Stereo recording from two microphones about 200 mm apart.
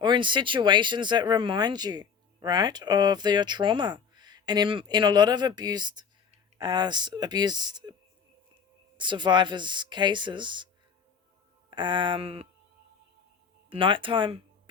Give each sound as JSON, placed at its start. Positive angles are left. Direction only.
{"t": 0.0, "sound": "speech", "side_deg": -25}
{"t": 9.0, "sound": "speech", "side_deg": -25}
{"t": 11.7, "sound": "speech", "side_deg": -25}
{"t": 13.7, "sound": "speech", "side_deg": -25}